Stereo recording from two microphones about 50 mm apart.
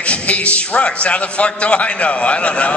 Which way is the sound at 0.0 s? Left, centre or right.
Left.